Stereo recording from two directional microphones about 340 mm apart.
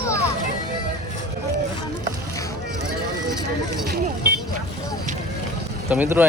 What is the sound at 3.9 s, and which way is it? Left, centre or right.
Speech, right.